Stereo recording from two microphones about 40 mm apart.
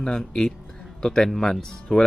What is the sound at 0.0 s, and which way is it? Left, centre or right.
Speech, centre.